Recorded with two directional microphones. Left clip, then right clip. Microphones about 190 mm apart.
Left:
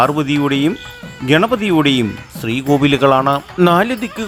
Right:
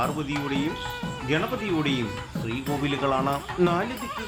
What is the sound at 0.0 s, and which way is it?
Speech, 55° left (ahead or behind).